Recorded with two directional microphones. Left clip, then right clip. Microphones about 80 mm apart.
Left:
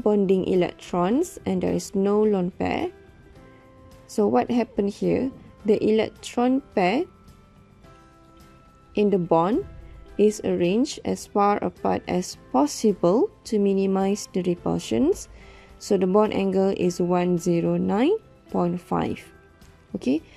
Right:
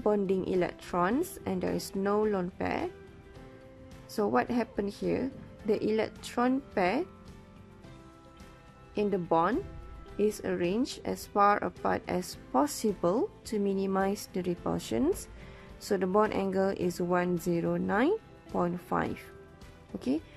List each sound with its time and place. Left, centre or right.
0.0 s speech: left
4.1 s speech: left
8.9 s speech: left
13.5 s speech: left